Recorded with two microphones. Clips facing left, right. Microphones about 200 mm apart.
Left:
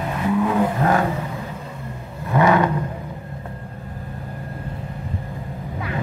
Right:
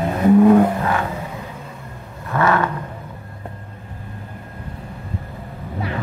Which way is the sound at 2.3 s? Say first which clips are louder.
Left 2 dB; 15° left (ahead or behind).